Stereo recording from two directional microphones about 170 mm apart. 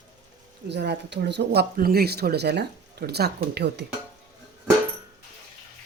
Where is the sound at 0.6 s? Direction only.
85° right.